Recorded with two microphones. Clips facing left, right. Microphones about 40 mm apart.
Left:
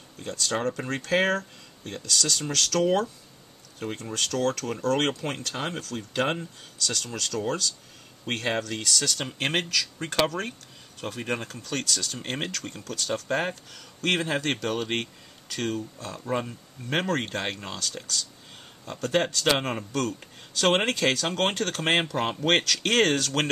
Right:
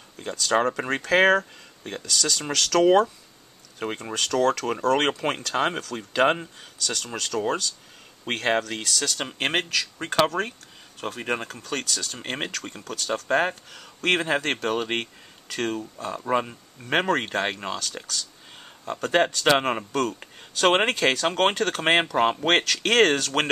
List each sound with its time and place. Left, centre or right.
0.6 s speech: right
2.4 s speech: right
3.8 s speech: right
5.4 s speech: right